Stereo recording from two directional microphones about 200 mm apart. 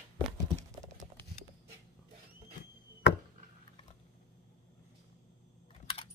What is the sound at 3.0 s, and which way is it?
Chop, 60° left (ahead or behind).